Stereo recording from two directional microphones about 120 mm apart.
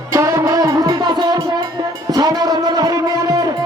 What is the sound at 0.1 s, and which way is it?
Music, 25° right (ahead or behind).